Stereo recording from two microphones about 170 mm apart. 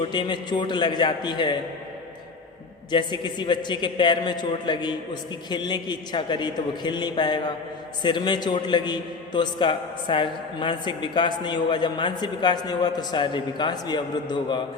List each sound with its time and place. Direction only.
0.1 s a man's voice: 25° left (ahead or behind)
2.9 s a man's voice: 25° left (ahead or behind)